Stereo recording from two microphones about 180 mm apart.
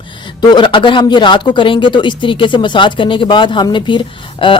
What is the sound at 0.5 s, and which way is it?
Speech, 25° left (ahead or behind).